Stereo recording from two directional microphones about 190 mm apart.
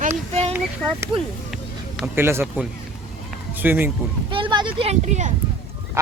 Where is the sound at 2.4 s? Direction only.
Centre (ahead or behind).